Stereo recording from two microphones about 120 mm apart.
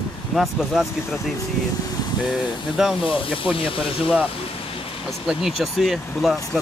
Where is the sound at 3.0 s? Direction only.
45° left (ahead or behind).